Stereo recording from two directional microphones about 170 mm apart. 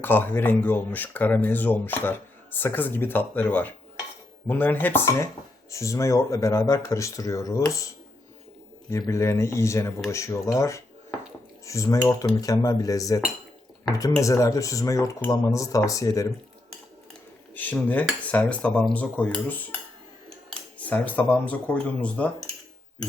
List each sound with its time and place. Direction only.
0.0 s speech: 10° left (ahead or behind)
8.9 s speech: 15° left (ahead or behind)
17.5 s speech: 10° left (ahead or behind)
20.7 s speech: 10° left (ahead or behind)